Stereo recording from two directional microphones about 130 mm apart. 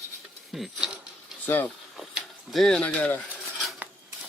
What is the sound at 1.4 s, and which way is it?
Speech, 15° left (ahead or behind).